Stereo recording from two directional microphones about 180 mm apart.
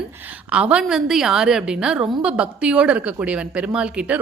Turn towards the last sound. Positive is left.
turn(degrees=-5)  # may be behind; listen again after turning